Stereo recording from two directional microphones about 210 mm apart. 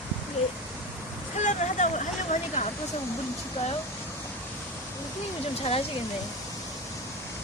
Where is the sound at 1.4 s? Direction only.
35° left (ahead or behind).